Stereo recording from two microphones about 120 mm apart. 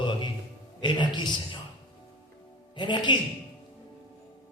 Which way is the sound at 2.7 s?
40° left (ahead or behind).